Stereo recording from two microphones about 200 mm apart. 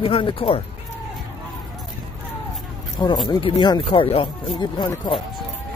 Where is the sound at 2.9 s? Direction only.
20° left (ahead or behind).